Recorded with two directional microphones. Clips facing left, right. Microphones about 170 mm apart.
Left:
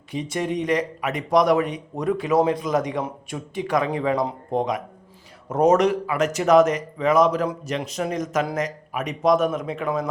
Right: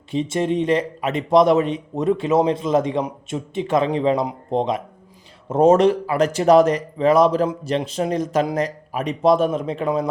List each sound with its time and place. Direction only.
0.1 s speech: 25° right (ahead or behind)